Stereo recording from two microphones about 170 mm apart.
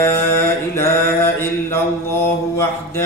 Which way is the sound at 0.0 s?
15° left (ahead or behind).